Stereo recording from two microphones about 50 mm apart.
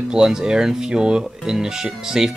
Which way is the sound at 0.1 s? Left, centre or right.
Centre.